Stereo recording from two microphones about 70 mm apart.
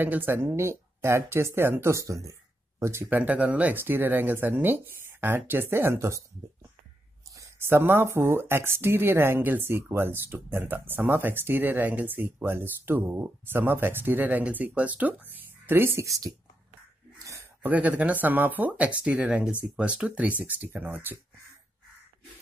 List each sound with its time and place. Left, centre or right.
0.0 s speech: right
3.1 s speech: right
7.5 s speech: right
16.1 s a woman's voice: right
17.2 s a sound: right
17.6 s speech: right